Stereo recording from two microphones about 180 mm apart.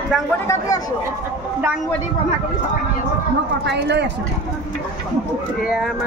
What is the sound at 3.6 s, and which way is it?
Speech, 70° right (ahead or behind).